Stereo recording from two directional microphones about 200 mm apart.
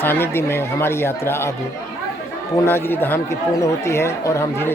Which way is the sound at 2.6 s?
10° left (ahead or behind).